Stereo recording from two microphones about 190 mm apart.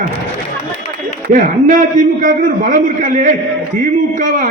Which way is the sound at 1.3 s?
45° right (ahead or behind).